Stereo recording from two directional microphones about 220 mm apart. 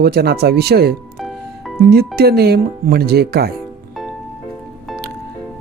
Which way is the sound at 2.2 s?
45° right (ahead or behind).